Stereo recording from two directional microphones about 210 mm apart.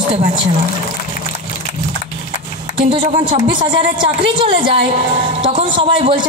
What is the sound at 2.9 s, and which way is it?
A woman's voice, 25° right (ahead or behind).